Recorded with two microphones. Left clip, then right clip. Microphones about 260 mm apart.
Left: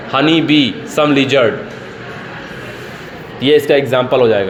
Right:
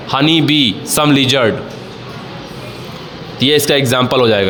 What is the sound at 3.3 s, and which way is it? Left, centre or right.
Speech, right.